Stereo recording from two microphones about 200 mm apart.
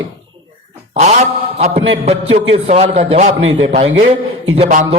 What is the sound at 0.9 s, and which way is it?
A man's voice, 35° right (ahead or behind).